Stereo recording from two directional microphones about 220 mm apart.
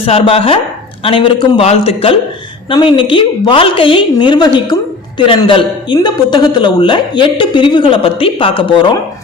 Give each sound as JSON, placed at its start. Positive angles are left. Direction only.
{"t": 0.0, "sound": "a woman's voice", "side_deg": 25}